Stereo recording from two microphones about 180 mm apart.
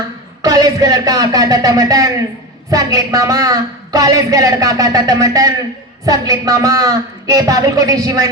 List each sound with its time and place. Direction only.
0.4 s a woman's voice: 20° right (ahead or behind)